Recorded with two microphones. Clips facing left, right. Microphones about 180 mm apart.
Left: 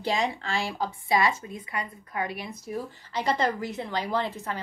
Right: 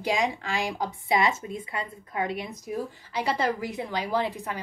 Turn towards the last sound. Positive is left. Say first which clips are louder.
# right 1 dB
turn(degrees=-15)  # may be behind; listen again after turning